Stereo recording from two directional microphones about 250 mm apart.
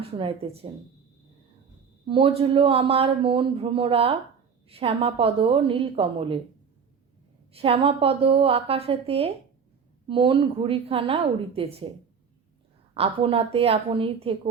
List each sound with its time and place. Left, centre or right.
0.0 s speech: right
2.0 s speech: right
7.5 s speech: right
12.9 s speech: right